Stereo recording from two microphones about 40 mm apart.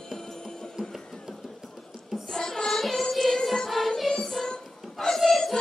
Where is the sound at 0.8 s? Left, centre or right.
Right.